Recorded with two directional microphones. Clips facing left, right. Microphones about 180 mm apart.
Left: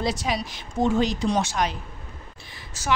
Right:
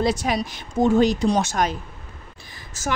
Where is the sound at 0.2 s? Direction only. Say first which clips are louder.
Right 3 dB; 55° right (ahead or behind).